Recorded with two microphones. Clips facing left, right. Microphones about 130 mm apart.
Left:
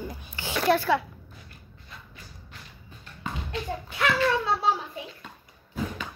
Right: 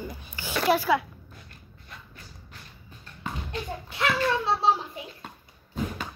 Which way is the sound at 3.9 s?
25° right (ahead or behind).